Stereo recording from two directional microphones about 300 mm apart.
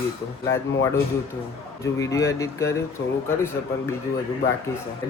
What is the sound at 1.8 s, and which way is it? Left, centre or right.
Speech, centre.